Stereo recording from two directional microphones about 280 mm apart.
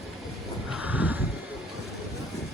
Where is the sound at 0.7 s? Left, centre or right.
Centre.